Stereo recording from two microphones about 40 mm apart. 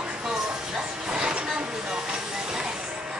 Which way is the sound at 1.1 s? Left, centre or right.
Right.